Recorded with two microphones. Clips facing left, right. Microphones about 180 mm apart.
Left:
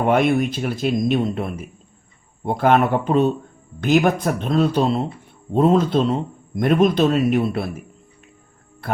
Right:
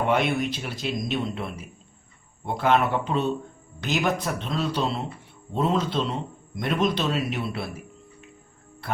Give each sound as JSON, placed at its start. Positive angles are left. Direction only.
{"t": 0.0, "sound": "speech", "side_deg": 50}